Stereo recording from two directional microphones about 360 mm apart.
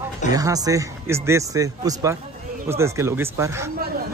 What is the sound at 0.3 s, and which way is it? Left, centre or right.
Speech, centre.